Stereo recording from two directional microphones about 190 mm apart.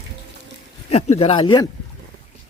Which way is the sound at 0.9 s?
35° left (ahead or behind).